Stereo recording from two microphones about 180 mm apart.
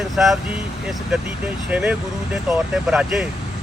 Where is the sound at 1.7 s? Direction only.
5° right (ahead or behind).